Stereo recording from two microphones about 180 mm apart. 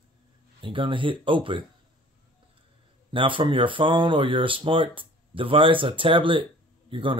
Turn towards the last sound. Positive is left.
turn(degrees=-30)  # may be behind; listen again after turning